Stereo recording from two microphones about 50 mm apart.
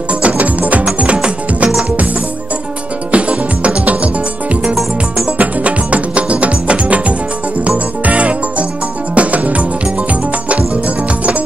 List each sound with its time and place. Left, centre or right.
0.2 s music: right
3.1 s music: right
5.4 s music: right